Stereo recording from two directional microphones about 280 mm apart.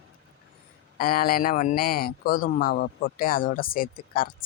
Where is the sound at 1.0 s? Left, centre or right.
Left.